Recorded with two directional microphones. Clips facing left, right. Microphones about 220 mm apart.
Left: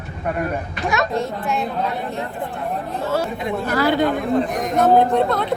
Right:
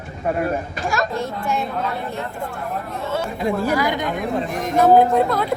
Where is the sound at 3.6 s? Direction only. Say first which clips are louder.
Left 3 dB; 15° right (ahead or behind).